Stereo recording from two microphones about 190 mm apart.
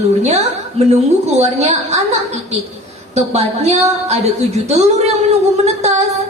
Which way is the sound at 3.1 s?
35° right (ahead or behind).